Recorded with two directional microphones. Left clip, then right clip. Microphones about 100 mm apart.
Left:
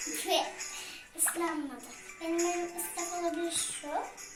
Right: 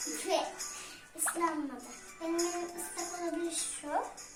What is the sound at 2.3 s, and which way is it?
Music, 85° right.